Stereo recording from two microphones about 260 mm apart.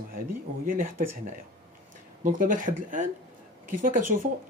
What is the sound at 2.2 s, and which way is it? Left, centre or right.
Speech, right.